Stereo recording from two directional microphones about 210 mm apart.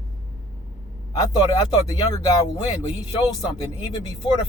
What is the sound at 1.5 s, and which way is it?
Speech, 15° left (ahead or behind).